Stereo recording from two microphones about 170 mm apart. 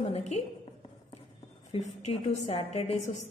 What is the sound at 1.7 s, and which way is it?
A woman's voice, 40° left (ahead or behind).